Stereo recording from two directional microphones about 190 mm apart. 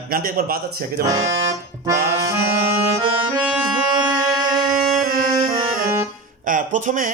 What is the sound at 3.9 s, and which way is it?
Music, 20° right (ahead or behind).